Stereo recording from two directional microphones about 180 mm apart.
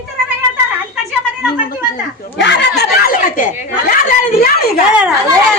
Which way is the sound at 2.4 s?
65° left (ahead or behind).